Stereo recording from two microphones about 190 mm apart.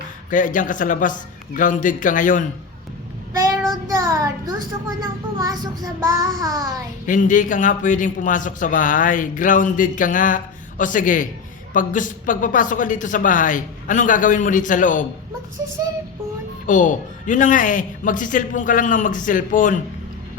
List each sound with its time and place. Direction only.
0.3 s a man's voice: 45° left (ahead or behind)
3.3 s child singing: 15° right (ahead or behind)
5.4 s child singing: 20° right (ahead or behind)
7.0 s a man's voice: 40° left (ahead or behind)
16.6 s a man's voice: 40° left (ahead or behind)